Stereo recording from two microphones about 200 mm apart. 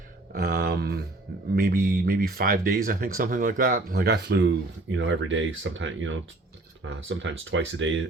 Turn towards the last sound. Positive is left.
turn(degrees=-70)  # may be behind; listen again after turning